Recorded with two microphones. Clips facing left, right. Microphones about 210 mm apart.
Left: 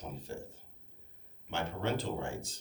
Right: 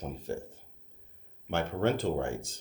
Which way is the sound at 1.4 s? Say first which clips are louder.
Right 6 dB; 55° right (ahead or behind).